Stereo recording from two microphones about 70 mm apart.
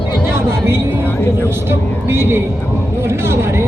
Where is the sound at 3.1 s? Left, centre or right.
Right.